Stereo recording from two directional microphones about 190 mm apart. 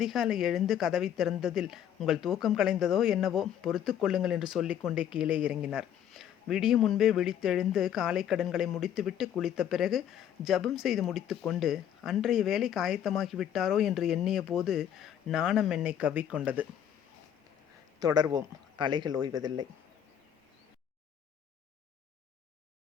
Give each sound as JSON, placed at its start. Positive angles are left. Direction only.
{"t": 0.0, "sound": "speech", "side_deg": 0}
{"t": 18.0, "sound": "speech", "side_deg": -20}